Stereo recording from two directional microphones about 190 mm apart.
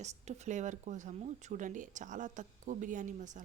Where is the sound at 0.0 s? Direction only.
35° right (ahead or behind).